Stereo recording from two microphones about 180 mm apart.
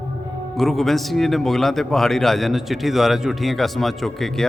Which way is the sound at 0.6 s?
Centre (ahead or behind).